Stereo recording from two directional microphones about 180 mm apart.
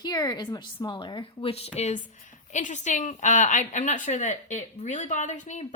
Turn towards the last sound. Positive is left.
turn(degrees=40)  # may be behind; listen again after turning